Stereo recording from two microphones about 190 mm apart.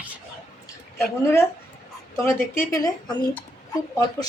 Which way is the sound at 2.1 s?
15° left (ahead or behind).